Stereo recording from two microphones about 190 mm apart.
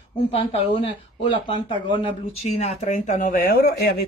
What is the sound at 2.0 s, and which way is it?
Speech, 35° left (ahead or behind).